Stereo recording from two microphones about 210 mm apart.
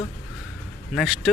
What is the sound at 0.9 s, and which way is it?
Speech, centre (ahead or behind).